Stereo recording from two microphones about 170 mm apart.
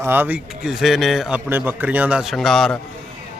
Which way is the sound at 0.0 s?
10° right (ahead or behind).